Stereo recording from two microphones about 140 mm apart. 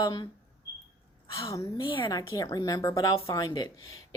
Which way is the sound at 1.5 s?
25° left (ahead or behind).